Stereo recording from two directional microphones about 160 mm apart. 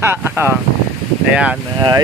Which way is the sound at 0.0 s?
15° right (ahead or behind).